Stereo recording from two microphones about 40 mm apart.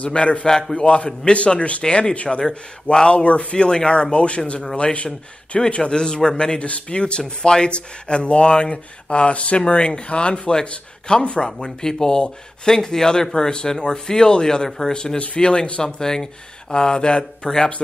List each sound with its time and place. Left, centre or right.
0.0 s speech: left
0.5 s speech: centre
3.3 s speech: left
5.8 s speech: centre
15.1 s speech: left
15.8 s speech: centre